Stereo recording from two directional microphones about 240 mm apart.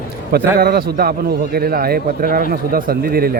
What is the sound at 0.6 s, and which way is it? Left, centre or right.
A man's voice, right.